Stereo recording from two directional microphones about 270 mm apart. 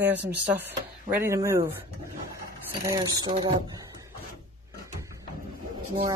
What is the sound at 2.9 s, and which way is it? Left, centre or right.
Speech, centre.